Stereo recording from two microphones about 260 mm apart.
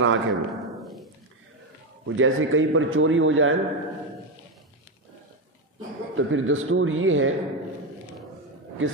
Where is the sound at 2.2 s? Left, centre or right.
Right.